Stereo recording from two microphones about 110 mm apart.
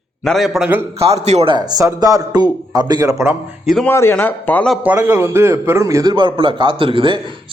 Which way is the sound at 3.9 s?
20° left (ahead or behind).